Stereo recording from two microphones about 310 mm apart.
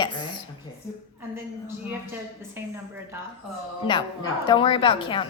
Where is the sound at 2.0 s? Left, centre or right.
Centre.